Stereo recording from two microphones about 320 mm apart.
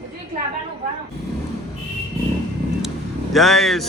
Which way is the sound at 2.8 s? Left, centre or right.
Centre.